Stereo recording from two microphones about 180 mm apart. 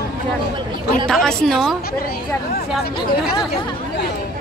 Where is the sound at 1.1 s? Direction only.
5° left (ahead or behind).